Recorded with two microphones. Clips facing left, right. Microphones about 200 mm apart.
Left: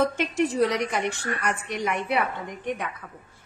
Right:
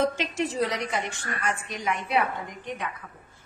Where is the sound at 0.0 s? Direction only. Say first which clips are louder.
Left 3 dB; 60° left (ahead or behind).